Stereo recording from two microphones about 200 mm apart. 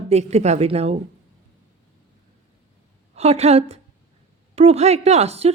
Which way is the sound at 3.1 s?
30° right (ahead or behind).